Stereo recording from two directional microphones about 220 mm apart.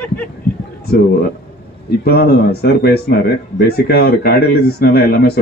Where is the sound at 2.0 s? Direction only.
45° left (ahead or behind).